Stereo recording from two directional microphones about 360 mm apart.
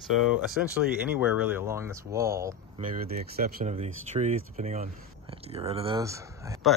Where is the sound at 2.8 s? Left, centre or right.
Right.